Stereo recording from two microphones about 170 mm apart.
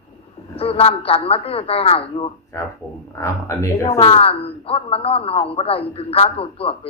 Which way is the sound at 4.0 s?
35° left (ahead or behind).